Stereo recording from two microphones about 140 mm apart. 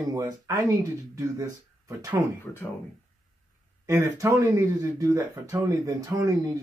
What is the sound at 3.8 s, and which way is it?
Speech, 25° right (ahead or behind).